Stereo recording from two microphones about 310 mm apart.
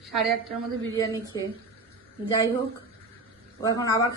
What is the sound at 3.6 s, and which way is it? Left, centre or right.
Speech, centre.